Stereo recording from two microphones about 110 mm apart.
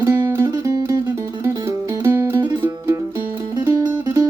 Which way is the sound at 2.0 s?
25° right (ahead or behind).